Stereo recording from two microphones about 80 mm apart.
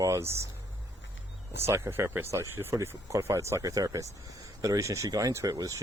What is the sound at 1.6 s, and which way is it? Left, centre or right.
Speech, right.